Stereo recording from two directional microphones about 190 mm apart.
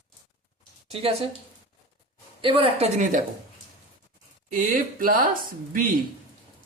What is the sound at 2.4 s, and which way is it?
Speech, 30° right (ahead or behind).